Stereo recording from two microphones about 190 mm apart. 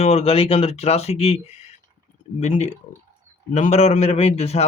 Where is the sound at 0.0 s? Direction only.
35° left (ahead or behind).